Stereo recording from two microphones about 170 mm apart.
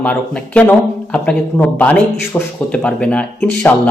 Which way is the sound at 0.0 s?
5° left (ahead or behind).